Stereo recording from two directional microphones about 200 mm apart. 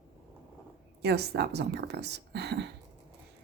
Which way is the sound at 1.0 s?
55° right (ahead or behind).